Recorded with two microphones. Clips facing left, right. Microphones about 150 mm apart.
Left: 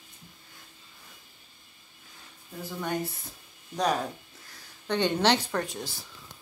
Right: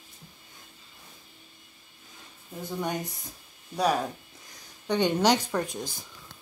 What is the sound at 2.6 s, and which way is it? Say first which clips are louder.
A woman's voice: even; 20° right (ahead or behind).